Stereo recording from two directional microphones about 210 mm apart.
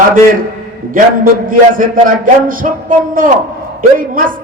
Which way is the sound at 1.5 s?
40° right (ahead or behind).